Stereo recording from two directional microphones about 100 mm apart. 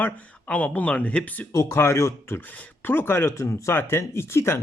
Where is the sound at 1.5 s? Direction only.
30° left (ahead or behind).